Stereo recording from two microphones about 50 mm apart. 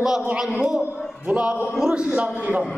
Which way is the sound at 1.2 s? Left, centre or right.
Right.